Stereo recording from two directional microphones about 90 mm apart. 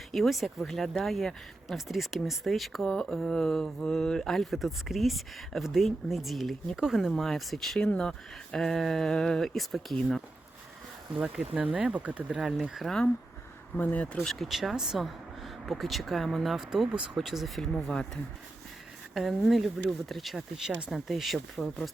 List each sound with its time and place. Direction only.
0.1 s speech: centre (ahead or behind)
11.5 s speech: 10° right (ahead or behind); by 13.1 s 5° left (ahead or behind)
13.7 s speech: 20° left (ahead or behind)
14.2 s speech: centre (ahead or behind)